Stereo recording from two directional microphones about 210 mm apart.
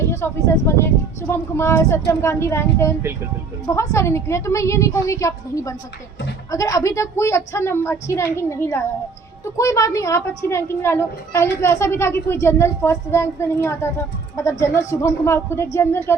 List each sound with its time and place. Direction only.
0.0 s a woman's voice: 15° left (ahead or behind)